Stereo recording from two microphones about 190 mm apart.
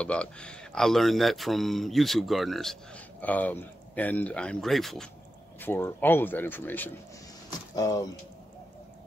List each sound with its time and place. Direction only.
0.0 s speech: 5° left (ahead or behind)